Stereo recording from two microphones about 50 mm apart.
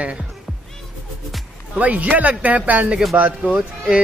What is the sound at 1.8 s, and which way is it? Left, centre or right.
Speech, right.